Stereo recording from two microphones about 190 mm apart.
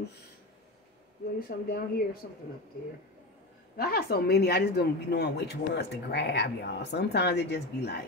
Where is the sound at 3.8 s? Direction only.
55° left (ahead or behind).